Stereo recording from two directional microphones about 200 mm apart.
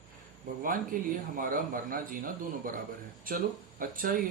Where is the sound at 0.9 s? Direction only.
45° right (ahead or behind).